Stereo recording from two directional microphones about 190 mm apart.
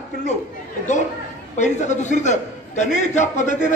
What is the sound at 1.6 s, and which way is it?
A man's voice, 40° left (ahead or behind).